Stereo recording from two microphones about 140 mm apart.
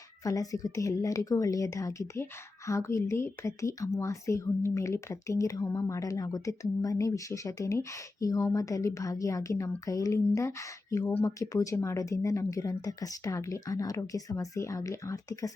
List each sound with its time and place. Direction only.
0.3 s speech: 25° left (ahead or behind)